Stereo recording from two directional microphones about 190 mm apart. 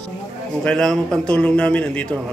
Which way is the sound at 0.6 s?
5° left (ahead or behind).